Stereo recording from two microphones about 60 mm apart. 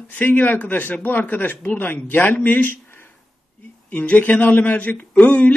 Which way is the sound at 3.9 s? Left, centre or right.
Left.